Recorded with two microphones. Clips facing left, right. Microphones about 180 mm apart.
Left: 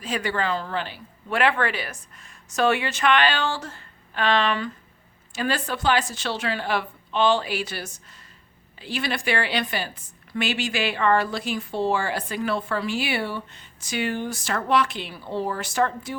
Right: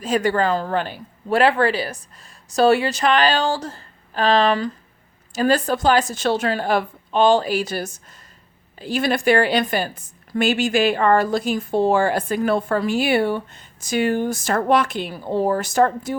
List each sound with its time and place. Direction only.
0.0 s a woman's voice: 45° right (ahead or behind)